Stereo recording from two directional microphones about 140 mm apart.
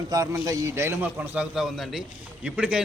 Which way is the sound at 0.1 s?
25° right (ahead or behind).